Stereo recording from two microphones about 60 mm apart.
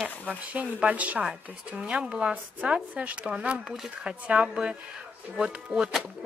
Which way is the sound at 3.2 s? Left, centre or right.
Centre.